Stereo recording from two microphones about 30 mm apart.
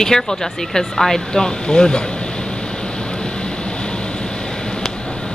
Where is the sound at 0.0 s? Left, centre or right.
Centre.